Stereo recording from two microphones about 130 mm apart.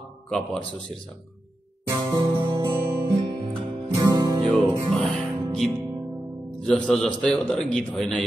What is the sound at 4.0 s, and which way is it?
Music, 30° right (ahead or behind).